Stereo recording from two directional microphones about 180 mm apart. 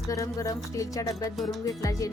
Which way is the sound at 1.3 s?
Centre (ahead or behind).